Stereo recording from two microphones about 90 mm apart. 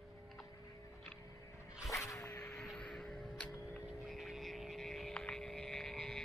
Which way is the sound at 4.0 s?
Centre (ahead or behind).